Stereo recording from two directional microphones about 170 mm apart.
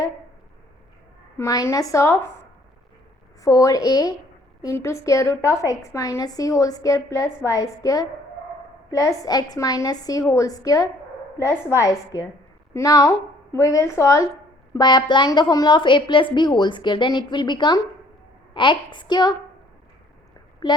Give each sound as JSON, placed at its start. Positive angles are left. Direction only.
{"t": 1.4, "sound": "a woman's voice", "side_deg": 20}
{"t": 3.4, "sound": "a woman's voice", "side_deg": 20}
{"t": 12.7, "sound": "a woman's voice", "side_deg": 20}